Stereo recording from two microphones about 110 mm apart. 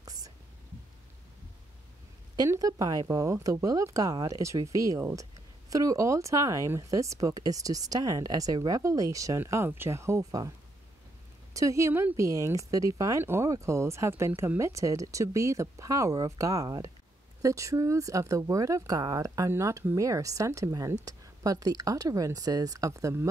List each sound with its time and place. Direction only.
0.0 s whispering: 35° right (ahead or behind)
2.3 s speech: 30° right (ahead or behind)
11.5 s speech: 30° right (ahead or behind)